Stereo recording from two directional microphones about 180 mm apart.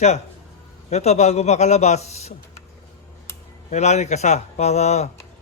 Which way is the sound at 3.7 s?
40° left (ahead or behind).